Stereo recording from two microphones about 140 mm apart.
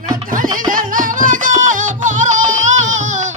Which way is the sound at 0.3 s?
75° right (ahead or behind).